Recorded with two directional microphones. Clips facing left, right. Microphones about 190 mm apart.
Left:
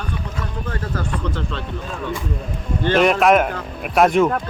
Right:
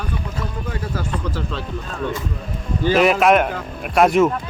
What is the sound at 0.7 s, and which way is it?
Speech, 10° right (ahead or behind).